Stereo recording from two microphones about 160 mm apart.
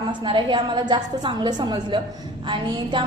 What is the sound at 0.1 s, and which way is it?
A woman's voice, 30° right (ahead or behind).